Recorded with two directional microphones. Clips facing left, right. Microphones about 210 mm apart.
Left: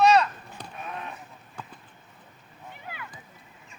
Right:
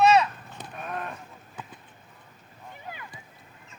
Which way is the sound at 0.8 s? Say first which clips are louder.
Right 3 dB; 50° right (ahead or behind).